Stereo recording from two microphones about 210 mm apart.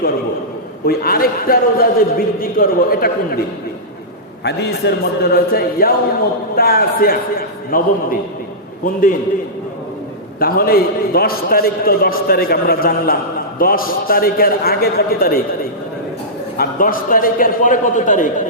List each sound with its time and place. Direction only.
0.9 s a man's voice: 45° left (ahead or behind)
4.4 s a man's voice: 50° left (ahead or behind)
8.8 s a man's voice: 40° left (ahead or behind)
10.4 s a man's voice: 45° left (ahead or behind)
16.6 s a man's voice: 40° left (ahead or behind)